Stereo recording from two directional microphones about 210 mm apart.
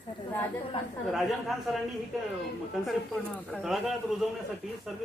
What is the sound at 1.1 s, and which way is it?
Speech, centre (ahead or behind).